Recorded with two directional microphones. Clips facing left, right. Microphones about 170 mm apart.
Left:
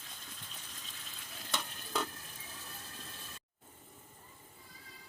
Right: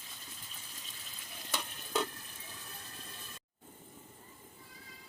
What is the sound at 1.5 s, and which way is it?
Stir, 5° right (ahead or behind).